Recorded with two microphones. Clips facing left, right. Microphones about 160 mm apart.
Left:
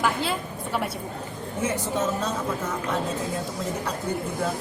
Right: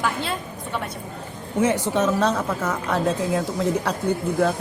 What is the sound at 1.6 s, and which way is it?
A woman's voice, 70° right (ahead or behind).